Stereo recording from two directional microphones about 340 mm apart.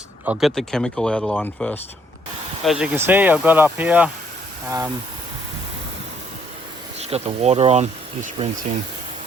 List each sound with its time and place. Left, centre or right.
0.3 s speech: centre
7.0 s speech: centre